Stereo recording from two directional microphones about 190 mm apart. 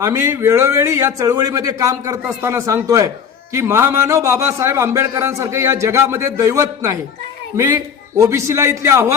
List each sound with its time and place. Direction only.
0.0 s a man's voice: 15° right (ahead or behind)